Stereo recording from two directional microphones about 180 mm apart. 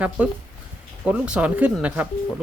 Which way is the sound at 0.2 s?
5° right (ahead or behind).